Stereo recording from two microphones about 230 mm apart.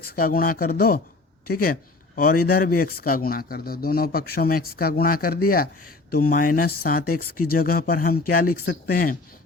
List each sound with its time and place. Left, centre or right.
0.2 s speech: left